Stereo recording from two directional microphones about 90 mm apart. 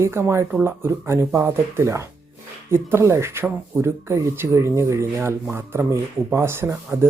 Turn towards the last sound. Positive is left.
turn(degrees=-25)  # may be behind; listen again after turning